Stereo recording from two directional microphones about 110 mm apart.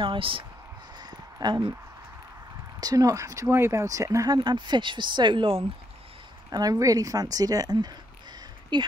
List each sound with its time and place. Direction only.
0.0 s speech: 50° right (ahead or behind)
2.8 s speech: 35° right (ahead or behind)
6.5 s speech: 35° right (ahead or behind)